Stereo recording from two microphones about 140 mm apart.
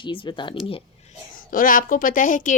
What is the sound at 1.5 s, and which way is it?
A woman's voice, 80° left.